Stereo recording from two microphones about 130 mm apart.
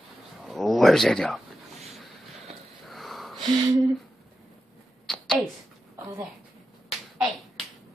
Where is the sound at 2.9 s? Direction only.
Centre (ahead or behind).